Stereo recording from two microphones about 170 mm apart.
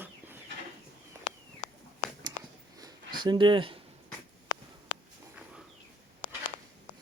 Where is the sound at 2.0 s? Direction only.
60° left (ahead or behind).